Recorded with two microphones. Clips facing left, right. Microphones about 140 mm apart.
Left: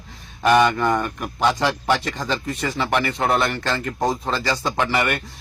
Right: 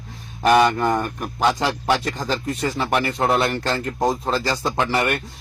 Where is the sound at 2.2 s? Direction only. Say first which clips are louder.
Right 1 dB; 35° right (ahead or behind).